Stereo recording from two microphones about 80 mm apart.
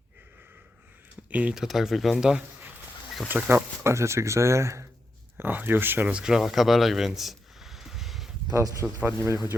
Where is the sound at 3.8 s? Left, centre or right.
Right.